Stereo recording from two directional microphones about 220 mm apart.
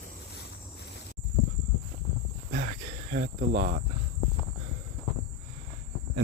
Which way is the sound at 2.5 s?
35° right (ahead or behind).